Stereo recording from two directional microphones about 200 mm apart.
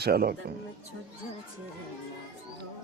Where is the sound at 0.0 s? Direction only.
50° right (ahead or behind).